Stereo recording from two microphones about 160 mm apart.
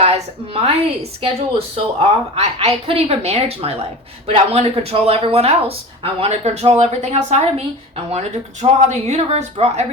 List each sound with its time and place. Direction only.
0.0 s a woman's voice: 40° right (ahead or behind)